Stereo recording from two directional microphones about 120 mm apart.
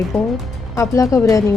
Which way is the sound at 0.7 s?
25° left (ahead or behind).